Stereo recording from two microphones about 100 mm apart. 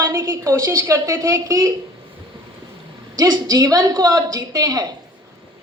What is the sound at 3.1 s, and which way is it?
A woman's voice, 40° right (ahead or behind).